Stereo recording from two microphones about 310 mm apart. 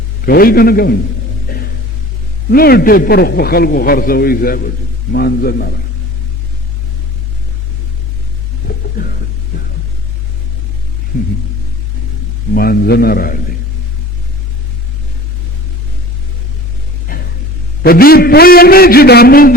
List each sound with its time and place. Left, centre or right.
0.3 s a man's voice: left
2.5 s a man's voice: left
8.6 s a sound: left
12.5 s a man's voice: left
17.1 s music: left
17.8 s a man's voice: left